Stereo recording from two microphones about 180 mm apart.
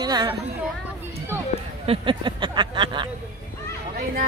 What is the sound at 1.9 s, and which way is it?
A woman's voice, 25° right (ahead or behind).